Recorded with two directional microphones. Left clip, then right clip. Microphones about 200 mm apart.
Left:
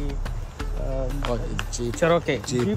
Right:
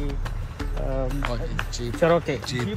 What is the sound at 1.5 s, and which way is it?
Speech, 10° left (ahead or behind).